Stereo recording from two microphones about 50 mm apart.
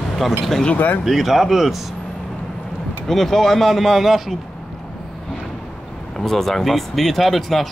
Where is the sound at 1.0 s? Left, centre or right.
Centre.